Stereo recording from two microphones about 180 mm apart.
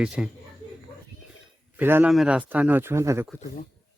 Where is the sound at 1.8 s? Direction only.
10° right (ahead or behind).